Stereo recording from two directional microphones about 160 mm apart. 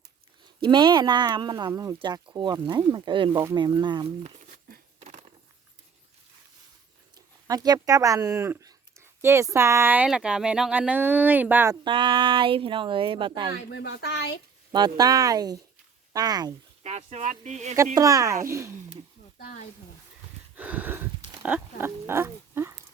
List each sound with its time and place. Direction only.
0.6 s speech: 30° right (ahead or behind)
4.9 s dog: 50° right (ahead or behind)
7.4 s speech: 25° right (ahead or behind)
11.7 s speech: 30° right (ahead or behind)
13.7 s speech: 90° left
14.7 s speech: 25° right (ahead or behind)
16.8 s speech: 45° right (ahead or behind)
17.9 s speech: 20° right (ahead or behind)
20.6 s a sound: 10° right (ahead or behind)